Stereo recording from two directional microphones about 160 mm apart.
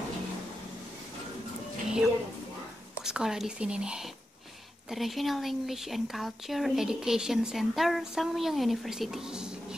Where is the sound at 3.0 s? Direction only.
5° right (ahead or behind).